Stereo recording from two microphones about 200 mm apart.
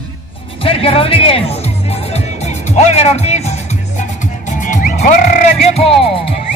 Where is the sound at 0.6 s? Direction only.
30° left (ahead or behind).